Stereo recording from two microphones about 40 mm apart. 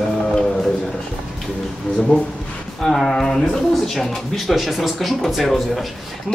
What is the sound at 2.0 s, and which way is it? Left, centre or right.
Speech, left.